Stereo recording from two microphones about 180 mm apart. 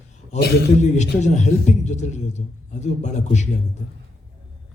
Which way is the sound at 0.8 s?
40° left (ahead or behind).